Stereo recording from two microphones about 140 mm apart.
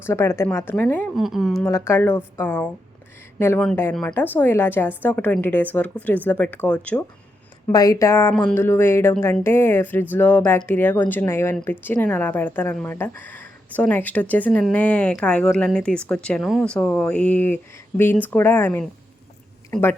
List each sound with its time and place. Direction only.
0.0 s a woman's voice: 20° left (ahead or behind)
1.1 s speech: centre (ahead or behind)
1.6 s speech: 20° left (ahead or behind)
7.7 s speech: 25° left (ahead or behind)